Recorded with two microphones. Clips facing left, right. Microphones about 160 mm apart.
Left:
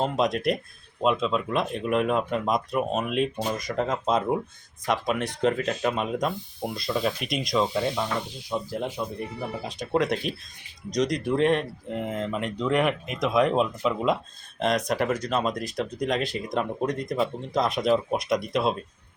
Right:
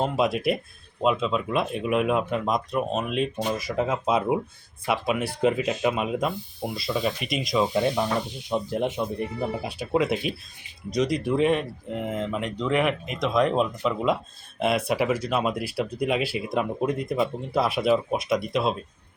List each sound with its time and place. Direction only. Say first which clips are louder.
0.0 s speech: right 1 dB; 5° right (ahead or behind)
7.7 s speech: right 3 dB; 15° right (ahead or behind); by 18.8 s centre (ahead or behind)